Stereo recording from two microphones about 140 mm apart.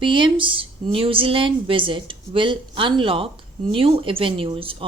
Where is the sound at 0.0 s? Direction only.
35° right (ahead or behind).